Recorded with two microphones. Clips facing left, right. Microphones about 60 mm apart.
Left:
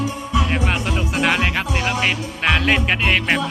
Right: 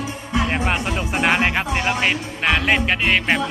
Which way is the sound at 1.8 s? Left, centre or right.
Centre.